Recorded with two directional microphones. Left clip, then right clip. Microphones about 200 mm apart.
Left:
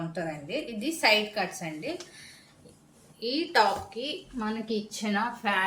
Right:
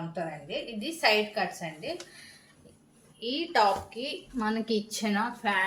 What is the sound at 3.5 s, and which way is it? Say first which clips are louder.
Speech: even; 20° left (ahead or behind).